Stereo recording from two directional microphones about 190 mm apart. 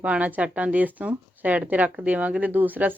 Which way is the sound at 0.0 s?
5° right (ahead or behind).